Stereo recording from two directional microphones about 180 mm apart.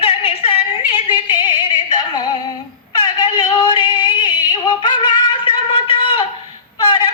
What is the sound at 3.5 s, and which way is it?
Yodeling, 25° left (ahead or behind).